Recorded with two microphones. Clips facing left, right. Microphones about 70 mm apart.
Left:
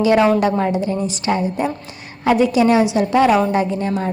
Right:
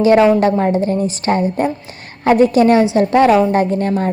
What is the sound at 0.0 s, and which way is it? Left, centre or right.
A woman's voice, right.